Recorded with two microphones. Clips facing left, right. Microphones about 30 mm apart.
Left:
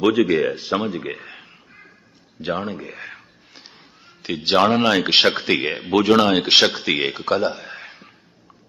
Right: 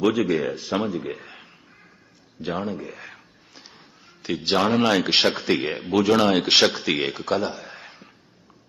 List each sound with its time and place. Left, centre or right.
0.2 s speech: left
2.6 s speech: left
3.0 s a sound: left
4.4 s speech: left
4.8 s speech: centre
5.0 s speech: left
6.1 s speech: centre
7.5 s speech: left
7.8 s a sound: left